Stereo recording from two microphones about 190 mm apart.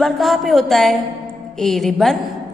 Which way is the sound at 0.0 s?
Centre (ahead or behind).